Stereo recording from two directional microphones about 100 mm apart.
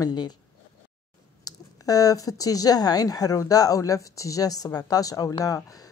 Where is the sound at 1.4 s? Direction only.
35° left (ahead or behind).